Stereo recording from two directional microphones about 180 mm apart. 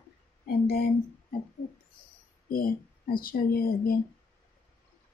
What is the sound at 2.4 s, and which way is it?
Speech, 50° left (ahead or behind).